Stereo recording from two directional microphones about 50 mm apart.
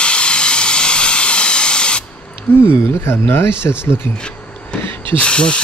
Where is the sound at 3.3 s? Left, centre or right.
Left.